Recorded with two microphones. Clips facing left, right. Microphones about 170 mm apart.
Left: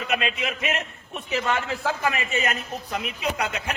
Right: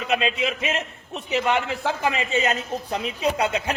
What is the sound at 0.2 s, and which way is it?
Speech, 25° right (ahead or behind).